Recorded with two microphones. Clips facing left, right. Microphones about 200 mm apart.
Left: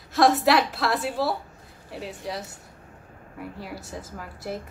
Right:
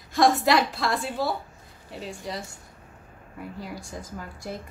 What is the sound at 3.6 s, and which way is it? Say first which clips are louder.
A woman's voice: even; 5° left (ahead or behind).